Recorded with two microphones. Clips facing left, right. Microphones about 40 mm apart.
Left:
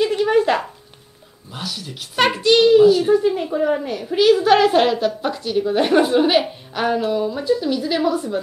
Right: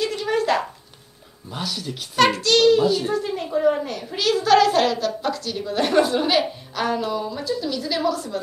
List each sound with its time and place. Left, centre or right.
0.0 s a sound: centre
1.5 s speech: centre
2.1 s a child's voice: centre
2.8 s a child's voice: centre